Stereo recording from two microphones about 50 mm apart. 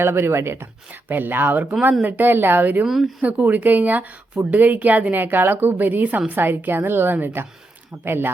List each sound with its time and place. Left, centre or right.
0.0 s speech: right
1.0 s a woman's voice: right
2.8 s speech: centre
3.2 s a woman's voice: right
6.3 s a woman's voice: right